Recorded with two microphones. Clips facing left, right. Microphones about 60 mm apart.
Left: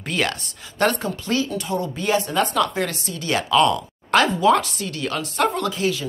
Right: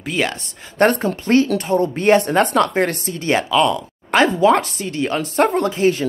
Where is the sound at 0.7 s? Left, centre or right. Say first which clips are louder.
Right 5 dB; right.